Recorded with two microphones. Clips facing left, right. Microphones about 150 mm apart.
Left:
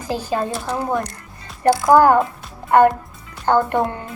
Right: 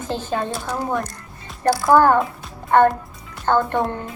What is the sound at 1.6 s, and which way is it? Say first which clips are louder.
A child's voice: left 2 dB; 20° left (ahead or behind).